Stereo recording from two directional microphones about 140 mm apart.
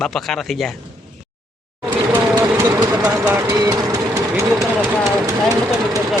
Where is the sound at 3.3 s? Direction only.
25° right (ahead or behind).